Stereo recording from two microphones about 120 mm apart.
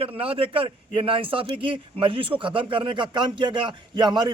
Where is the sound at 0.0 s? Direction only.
50° right (ahead or behind).